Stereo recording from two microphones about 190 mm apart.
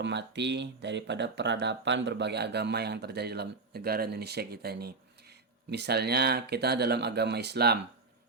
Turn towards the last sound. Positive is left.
turn(degrees=-60)  # may be behind; listen again after turning